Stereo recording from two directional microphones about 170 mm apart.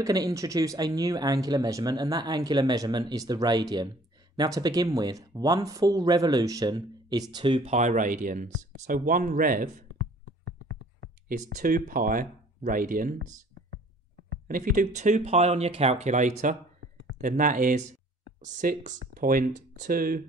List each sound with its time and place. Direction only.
0.0 s speech: 20° right (ahead or behind)
7.7 s speech: 45° right (ahead or behind)
10.4 s a sound: 80° right
11.5 s speech: 55° right (ahead or behind)
14.5 s speech: 55° right (ahead or behind)